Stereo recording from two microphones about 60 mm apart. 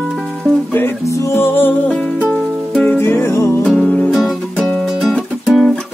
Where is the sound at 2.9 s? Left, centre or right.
Left.